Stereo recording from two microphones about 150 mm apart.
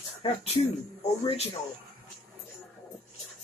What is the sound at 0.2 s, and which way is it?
Speech, 40° left (ahead or behind).